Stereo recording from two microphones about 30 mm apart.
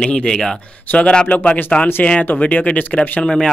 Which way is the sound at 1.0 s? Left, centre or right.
Left.